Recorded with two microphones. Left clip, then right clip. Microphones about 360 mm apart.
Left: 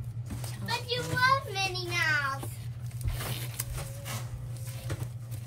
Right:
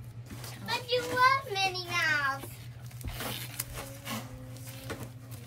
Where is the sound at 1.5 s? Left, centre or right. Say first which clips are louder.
Even; centre.